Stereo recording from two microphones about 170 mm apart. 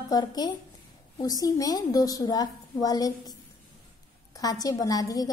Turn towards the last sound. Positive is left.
turn(degrees=20)  # may be behind; listen again after turning